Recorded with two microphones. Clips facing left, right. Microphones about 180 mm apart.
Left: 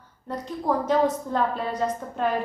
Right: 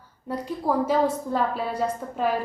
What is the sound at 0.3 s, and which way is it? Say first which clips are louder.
A woman's voice: even; 10° right (ahead or behind).